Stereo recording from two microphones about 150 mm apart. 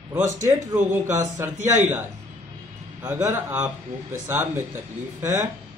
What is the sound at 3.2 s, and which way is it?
Speech, 20° right (ahead or behind).